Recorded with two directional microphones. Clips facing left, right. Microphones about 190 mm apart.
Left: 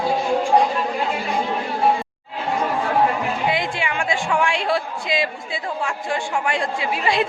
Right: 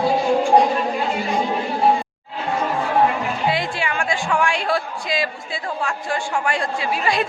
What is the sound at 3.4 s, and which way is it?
A woman's voice, 20° left (ahead or behind).